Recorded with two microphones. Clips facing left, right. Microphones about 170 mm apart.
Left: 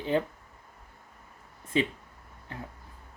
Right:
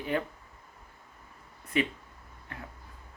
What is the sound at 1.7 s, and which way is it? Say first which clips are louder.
Speech: left 1 dB; 30° left (ahead or behind).